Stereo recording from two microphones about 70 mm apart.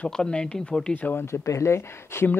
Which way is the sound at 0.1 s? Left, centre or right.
Centre.